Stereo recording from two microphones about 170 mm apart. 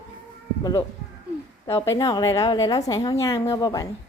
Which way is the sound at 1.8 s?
25° left (ahead or behind).